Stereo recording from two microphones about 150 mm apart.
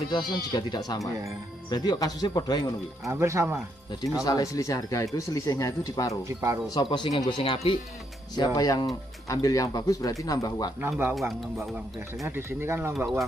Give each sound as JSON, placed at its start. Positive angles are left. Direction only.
{"t": 0.1, "sound": "speech", "side_deg": 30}
{"t": 3.1, "sound": "speech", "side_deg": -20}
{"t": 4.2, "sound": "speech", "side_deg": 25}
{"t": 6.2, "sound": "speech", "side_deg": -20}
{"t": 6.7, "sound": "speech", "side_deg": 30}
{"t": 8.4, "sound": "speech", "side_deg": 25}
{"t": 10.8, "sound": "speech", "side_deg": -15}
{"t": 11.1, "sound": "speech", "side_deg": 0}
{"t": 12.3, "sound": "speech", "side_deg": -15}